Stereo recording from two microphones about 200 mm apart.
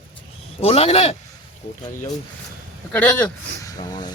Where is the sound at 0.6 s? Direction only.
30° left (ahead or behind).